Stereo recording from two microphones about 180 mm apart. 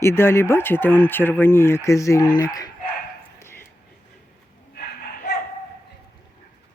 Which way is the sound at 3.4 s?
15° left (ahead or behind).